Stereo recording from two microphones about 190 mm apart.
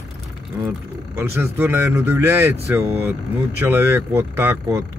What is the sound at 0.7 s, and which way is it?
Speech, 10° right (ahead or behind).